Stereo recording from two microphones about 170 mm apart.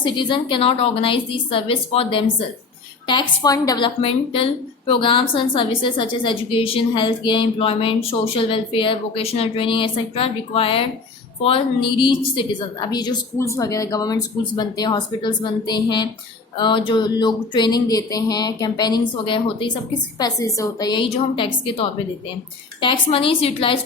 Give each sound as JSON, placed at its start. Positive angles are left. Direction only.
{"t": 0.0, "sound": "a woman's voice", "side_deg": 30}